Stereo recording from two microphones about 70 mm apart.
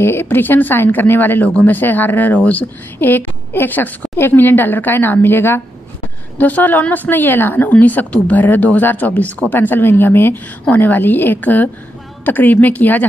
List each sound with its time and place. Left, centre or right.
0.0 s speech: left